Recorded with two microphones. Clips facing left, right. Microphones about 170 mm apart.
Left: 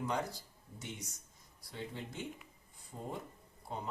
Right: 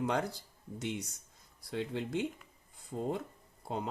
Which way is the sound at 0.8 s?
70° right (ahead or behind).